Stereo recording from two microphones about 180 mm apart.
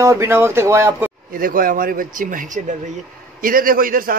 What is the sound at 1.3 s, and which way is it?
A man's voice, 50° right (ahead or behind).